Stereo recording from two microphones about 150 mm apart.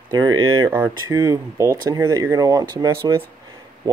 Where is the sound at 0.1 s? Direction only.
30° right (ahead or behind).